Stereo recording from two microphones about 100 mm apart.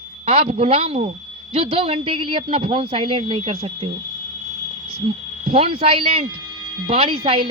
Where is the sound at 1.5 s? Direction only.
70° right (ahead or behind).